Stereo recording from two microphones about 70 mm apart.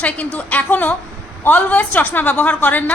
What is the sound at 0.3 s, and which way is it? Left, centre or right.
A woman's voice, left.